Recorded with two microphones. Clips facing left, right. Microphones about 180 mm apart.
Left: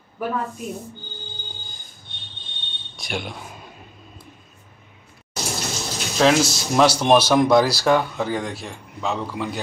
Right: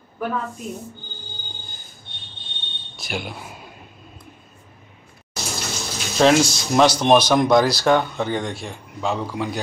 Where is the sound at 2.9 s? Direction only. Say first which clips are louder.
Even; centre (ahead or behind).